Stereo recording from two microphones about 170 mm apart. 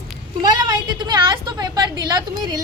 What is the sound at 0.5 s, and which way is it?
A woman's voice, 25° right (ahead or behind).